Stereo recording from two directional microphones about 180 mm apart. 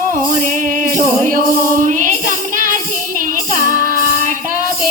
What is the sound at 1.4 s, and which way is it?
Music, 45° right (ahead or behind).